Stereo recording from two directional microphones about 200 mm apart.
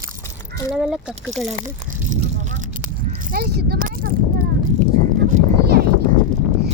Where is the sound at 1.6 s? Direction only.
35° right (ahead or behind).